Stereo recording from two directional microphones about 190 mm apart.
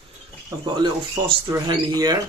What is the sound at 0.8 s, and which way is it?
Speech, 25° right (ahead or behind).